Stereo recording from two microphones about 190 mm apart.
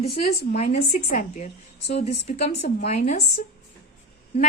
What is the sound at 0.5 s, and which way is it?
A woman's voice, 35° left (ahead or behind).